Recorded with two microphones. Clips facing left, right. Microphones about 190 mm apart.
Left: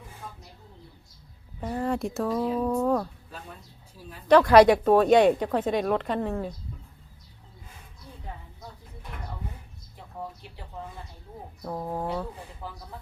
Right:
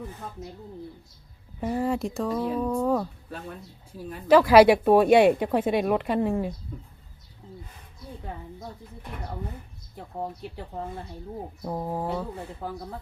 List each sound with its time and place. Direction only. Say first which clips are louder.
0.2 s speech: right 3 dB; 50° right (ahead or behind)
1.7 s speech: right 1 dB; 5° right (ahead or behind)
4.3 s speech: right 1 dB; 5° right (ahead or behind)
11.6 s speech: right 1 dB; 15° right (ahead or behind)